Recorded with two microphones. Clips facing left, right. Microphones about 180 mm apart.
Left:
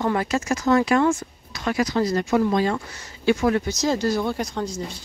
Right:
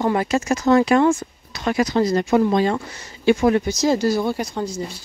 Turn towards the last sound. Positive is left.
turn(degrees=-5)  # may be behind; listen again after turning